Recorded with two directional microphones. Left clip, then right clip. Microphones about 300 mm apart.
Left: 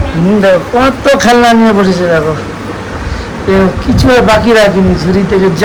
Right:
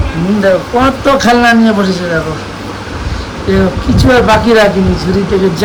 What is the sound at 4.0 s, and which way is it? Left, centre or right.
A man's voice, centre.